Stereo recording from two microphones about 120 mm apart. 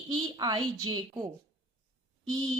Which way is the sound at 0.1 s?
40° right (ahead or behind).